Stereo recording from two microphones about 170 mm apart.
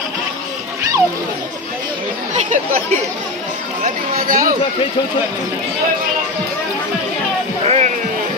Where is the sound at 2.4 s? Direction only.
50° right (ahead or behind).